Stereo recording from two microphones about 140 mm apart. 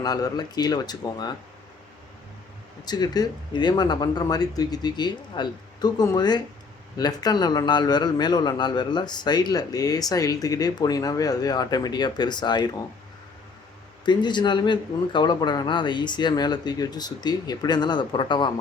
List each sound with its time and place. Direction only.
0.0 s a man's voice: 30° left (ahead or behind)
2.8 s a man's voice: 30° left (ahead or behind)
14.0 s speech: 35° left (ahead or behind)